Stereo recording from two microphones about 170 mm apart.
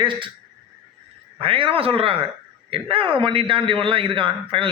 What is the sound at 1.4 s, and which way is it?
A man's voice, 30° right (ahead or behind).